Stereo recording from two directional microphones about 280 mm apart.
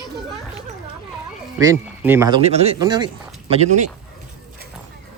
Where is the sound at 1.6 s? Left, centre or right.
Centre.